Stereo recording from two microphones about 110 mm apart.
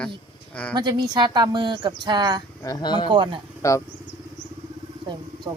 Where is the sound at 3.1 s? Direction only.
45° right (ahead or behind).